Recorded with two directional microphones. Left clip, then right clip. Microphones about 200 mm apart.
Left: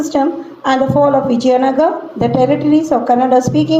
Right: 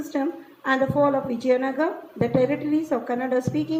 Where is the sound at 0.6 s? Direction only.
40° right (ahead or behind).